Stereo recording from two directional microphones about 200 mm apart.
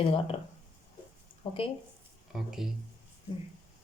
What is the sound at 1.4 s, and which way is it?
Speech, 25° left (ahead or behind).